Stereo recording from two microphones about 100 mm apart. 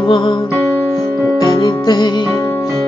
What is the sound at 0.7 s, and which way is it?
Keyboard, 20° left (ahead or behind).